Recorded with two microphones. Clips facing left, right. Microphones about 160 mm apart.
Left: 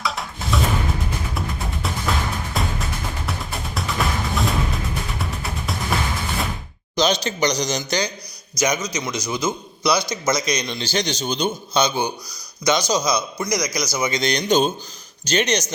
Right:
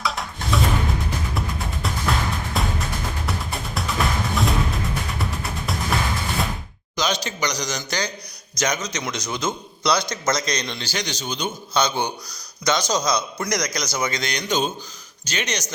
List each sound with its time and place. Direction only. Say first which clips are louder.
0.0 s music: even; centre (ahead or behind)
3.8 s music: even; centre (ahead or behind)
6.9 s a man's voice: left 5 dB; 25° left (ahead or behind); by 10.8 s 10° left (ahead or behind)
10.8 s a man's voice: left 5 dB; 25° left (ahead or behind)
11.8 s a man's voice: left 1 dB; 10° left (ahead or behind)
14.2 s a man's voice: left 9 dB; 25° left (ahead or behind)